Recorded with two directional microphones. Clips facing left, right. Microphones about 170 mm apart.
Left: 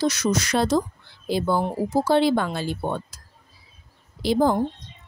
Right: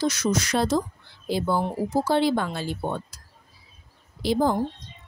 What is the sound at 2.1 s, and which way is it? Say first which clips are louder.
Speech: left 4 dB; 70° left (ahead or behind).